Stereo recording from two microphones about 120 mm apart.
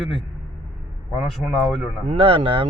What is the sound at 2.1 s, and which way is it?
Speech, 50° right (ahead or behind).